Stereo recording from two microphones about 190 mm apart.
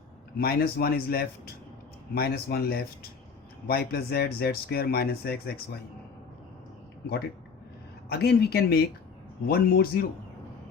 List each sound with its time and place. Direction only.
0.3 s speech: 55° left (ahead or behind)
8.1 s speech: 55° left (ahead or behind)